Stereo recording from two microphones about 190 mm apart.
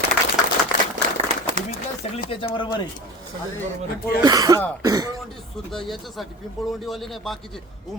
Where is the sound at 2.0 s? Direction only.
30° left (ahead or behind).